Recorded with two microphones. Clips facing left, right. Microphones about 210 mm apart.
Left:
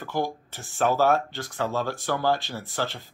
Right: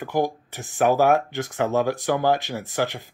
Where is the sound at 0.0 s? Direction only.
15° right (ahead or behind).